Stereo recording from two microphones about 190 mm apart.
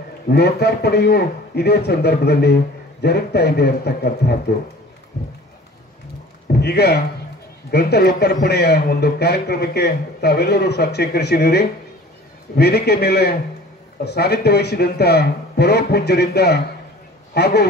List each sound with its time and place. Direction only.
0.3 s a man's voice: 60° left (ahead or behind)
6.4 s a sound: 55° left (ahead or behind)
7.7 s a man's voice: 60° left (ahead or behind)